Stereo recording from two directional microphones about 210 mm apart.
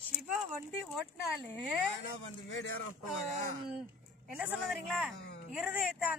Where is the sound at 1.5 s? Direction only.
5° left (ahead or behind).